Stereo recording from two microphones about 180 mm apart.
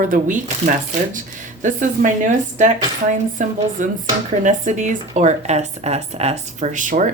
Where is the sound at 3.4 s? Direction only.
45° right (ahead or behind).